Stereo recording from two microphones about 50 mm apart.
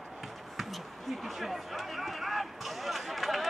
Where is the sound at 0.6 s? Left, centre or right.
Centre.